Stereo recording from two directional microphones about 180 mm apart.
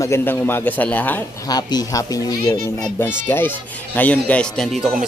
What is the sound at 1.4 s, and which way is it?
Speech, 20° left (ahead or behind).